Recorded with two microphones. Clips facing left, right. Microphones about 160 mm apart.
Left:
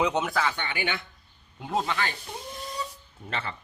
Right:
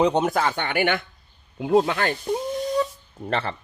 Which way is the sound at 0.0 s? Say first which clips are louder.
Right 6 dB; 35° right (ahead or behind).